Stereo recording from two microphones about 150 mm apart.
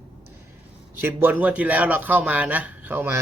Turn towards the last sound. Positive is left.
turn(degrees=-15)  # may be behind; listen again after turning